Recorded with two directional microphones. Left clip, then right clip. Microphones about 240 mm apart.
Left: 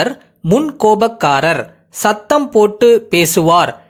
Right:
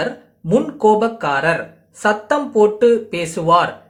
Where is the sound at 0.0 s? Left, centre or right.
Left.